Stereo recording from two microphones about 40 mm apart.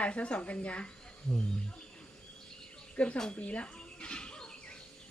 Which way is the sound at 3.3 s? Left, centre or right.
Left.